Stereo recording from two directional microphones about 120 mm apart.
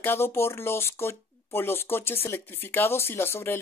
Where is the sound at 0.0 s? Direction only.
20° left (ahead or behind).